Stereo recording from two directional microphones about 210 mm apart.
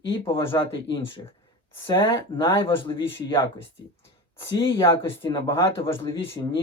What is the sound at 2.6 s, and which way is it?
Speech, 20° left (ahead or behind).